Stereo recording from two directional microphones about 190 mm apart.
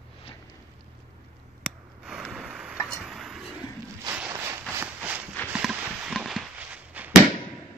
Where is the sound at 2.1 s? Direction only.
Centre (ahead or behind).